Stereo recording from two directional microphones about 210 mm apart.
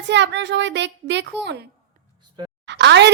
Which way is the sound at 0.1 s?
55° right (ahead or behind).